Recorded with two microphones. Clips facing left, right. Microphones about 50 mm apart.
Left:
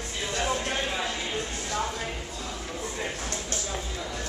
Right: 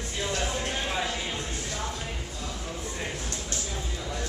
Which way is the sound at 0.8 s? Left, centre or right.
Centre.